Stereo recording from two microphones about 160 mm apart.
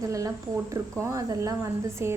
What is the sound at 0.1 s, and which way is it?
A woman's voice, 20° right (ahead or behind).